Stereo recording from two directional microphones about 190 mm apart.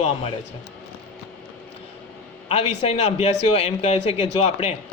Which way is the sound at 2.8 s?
35° left (ahead or behind).